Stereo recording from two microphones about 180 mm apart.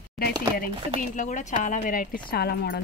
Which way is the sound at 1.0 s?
45° left (ahead or behind).